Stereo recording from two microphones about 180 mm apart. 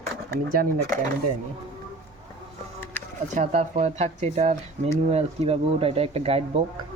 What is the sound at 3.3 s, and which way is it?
Speech, 40° right (ahead or behind).